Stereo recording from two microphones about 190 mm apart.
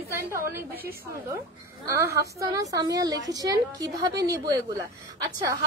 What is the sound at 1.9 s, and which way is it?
A woman's voice, 15° right (ahead or behind).